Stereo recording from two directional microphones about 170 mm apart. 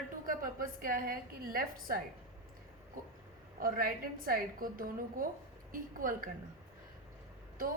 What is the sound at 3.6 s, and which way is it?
A woman's voice, 60° right (ahead or behind).